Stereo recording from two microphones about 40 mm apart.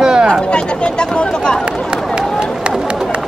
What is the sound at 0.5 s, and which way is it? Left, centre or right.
Speech, left.